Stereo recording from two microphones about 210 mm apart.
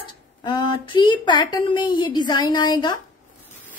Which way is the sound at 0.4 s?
20° left (ahead or behind).